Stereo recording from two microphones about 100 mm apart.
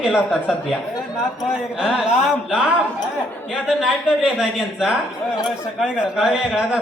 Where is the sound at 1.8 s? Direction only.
5° right (ahead or behind).